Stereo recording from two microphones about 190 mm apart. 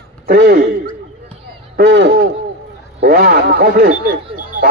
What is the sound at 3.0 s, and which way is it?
Radio, 55° right (ahead or behind).